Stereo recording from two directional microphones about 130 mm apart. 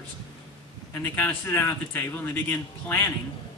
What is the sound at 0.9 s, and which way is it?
Speech, 15° left (ahead or behind).